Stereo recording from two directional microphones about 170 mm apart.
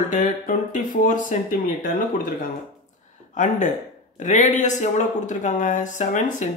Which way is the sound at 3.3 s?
45° left (ahead or behind).